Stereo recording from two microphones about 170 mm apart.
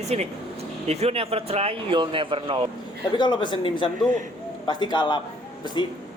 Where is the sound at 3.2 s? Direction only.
25° left (ahead or behind).